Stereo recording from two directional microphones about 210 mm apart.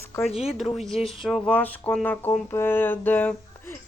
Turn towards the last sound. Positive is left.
turn(degrees=10)  # may be behind; listen again after turning